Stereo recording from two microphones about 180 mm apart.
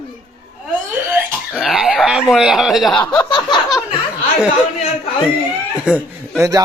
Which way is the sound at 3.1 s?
25° left (ahead or behind).